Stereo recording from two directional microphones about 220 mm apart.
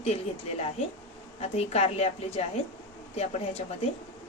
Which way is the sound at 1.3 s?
30° left (ahead or behind).